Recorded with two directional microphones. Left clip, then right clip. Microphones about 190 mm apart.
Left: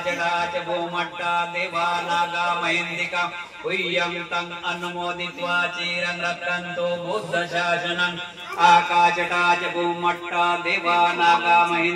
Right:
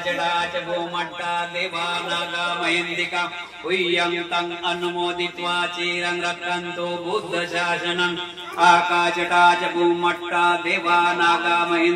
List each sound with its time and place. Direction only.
3.2 s a man's voice: 45° right (ahead or behind)